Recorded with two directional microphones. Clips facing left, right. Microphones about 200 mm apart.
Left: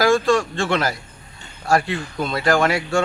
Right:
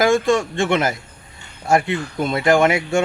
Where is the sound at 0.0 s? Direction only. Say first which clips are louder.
Right 1 dB; 20° right (ahead or behind).